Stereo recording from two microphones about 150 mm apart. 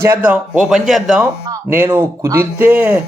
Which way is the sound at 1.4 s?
20° right (ahead or behind).